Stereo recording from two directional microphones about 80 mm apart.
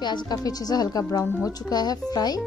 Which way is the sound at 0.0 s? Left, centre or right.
Left.